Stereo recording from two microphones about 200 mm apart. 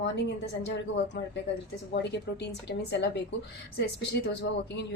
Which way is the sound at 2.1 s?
55° left (ahead or behind).